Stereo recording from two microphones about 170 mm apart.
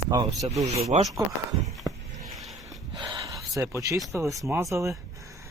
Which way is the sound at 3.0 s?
25° right (ahead or behind).